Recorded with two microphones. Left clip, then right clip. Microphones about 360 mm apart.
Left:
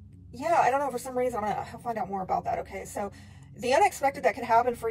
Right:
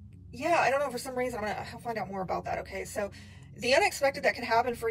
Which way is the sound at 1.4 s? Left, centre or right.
Centre.